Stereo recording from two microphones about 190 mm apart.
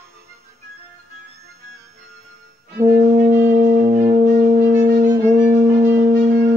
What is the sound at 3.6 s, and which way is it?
Music, 40° right (ahead or behind).